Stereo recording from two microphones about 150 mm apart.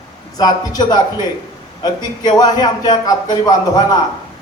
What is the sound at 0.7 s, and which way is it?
A man's voice, 25° left (ahead or behind).